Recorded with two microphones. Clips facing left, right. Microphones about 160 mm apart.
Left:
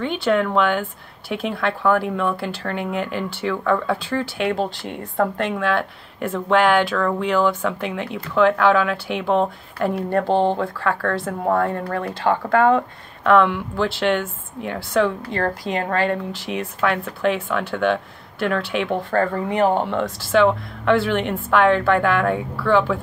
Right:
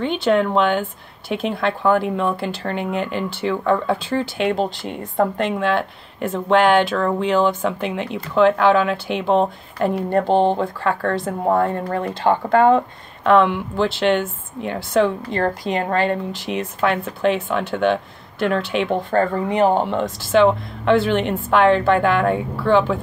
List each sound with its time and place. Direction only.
0.0 s speech: 25° right (ahead or behind)